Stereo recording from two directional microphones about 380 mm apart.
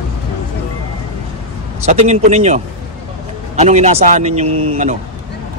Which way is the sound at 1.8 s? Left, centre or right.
Centre.